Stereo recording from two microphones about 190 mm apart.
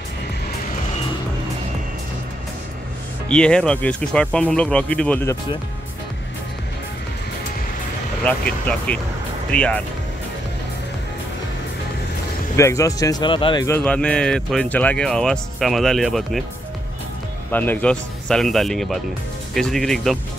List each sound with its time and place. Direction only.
3.3 s speech: 5° left (ahead or behind)
8.2 s speech: 5° left (ahead or behind)
12.5 s speech: 15° left (ahead or behind)
13.7 s speech: 10° left (ahead or behind)
17.5 s speech: 10° left (ahead or behind)